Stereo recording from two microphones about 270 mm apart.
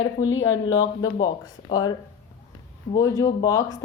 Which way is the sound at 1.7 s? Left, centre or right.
Centre.